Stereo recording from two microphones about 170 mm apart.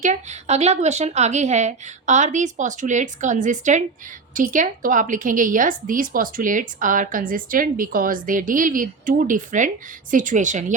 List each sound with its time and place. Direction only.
0.0 s a woman's voice: 45° right (ahead or behind)